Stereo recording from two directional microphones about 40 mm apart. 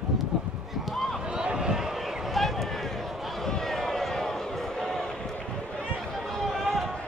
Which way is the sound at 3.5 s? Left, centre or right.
Centre.